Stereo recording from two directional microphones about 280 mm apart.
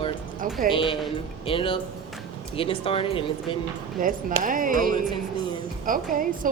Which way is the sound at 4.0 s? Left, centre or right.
Right.